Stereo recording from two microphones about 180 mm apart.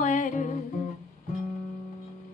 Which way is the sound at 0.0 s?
45° left (ahead or behind).